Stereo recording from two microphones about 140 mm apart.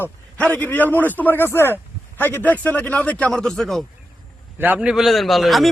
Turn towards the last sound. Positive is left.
turn(degrees=0)  # may be behind; listen again after turning